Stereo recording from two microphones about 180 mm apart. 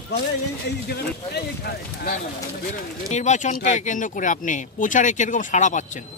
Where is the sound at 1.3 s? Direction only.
60° left (ahead or behind).